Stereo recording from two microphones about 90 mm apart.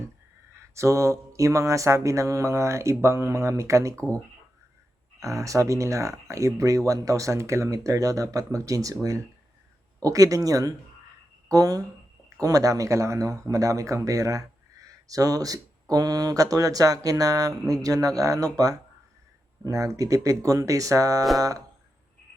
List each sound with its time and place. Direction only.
0.7 s speech: 35° right (ahead or behind)
5.2 s speech: 35° right (ahead or behind)